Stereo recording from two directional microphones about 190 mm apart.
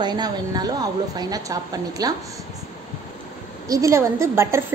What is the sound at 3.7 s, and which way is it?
Speech, 15° right (ahead or behind).